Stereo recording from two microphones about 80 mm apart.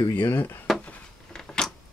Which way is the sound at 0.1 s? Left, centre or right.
Left.